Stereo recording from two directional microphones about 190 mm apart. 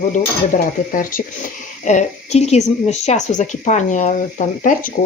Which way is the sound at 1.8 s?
40° left (ahead or behind).